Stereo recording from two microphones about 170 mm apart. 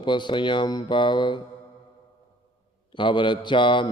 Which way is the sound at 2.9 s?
30° left (ahead or behind).